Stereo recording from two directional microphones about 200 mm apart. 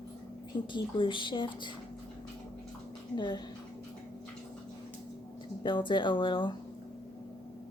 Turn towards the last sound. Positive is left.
turn(degrees=25)  # may be behind; listen again after turning